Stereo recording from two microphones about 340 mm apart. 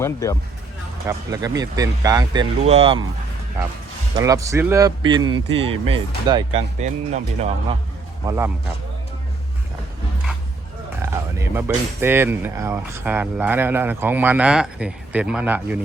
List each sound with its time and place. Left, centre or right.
0.0 s speech: centre
1.0 s speech: centre
8.3 s speech: centre
11.0 s speech: centre